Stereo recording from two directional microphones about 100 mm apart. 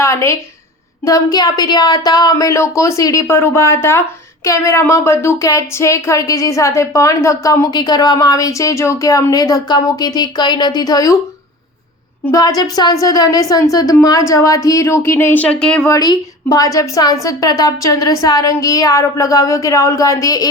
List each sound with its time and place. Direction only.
0.0 s a woman's voice: 30° left (ahead or behind)
12.3 s speech: 40° left (ahead or behind); by 15.9 s 10° left (ahead or behind)
15.9 s speech: 40° left (ahead or behind)